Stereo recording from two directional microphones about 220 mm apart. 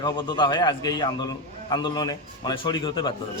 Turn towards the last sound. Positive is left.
turn(degrees=20)  # may be behind; listen again after turning